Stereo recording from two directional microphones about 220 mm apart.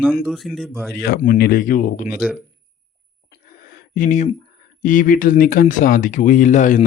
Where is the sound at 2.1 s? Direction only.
5° right (ahead or behind).